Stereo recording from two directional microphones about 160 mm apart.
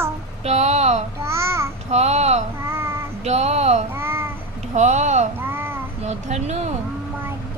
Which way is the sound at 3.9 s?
15° right (ahead or behind).